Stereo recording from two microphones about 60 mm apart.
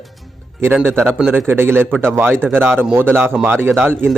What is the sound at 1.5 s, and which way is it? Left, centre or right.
A man's voice, right.